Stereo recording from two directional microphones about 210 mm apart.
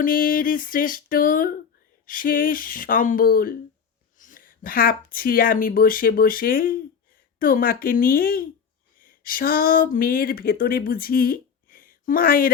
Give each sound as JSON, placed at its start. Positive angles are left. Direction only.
{"t": 0.0, "sound": "music", "side_deg": 40}
{"t": 4.2, "sound": "speech", "side_deg": 40}